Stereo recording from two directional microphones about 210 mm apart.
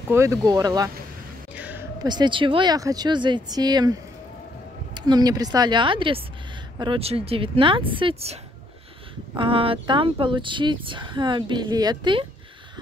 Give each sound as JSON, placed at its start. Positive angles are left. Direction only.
{"t": 0.1, "sound": "speech", "side_deg": -15}
{"t": 1.5, "sound": "a sound", "side_deg": -5}
{"t": 2.0, "sound": "speech", "side_deg": -20}